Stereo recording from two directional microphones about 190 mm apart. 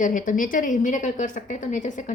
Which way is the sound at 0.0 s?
45° left (ahead or behind).